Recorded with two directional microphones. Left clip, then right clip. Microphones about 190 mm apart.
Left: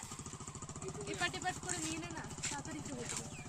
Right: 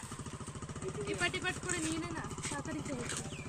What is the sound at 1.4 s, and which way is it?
Speech, 55° left (ahead or behind).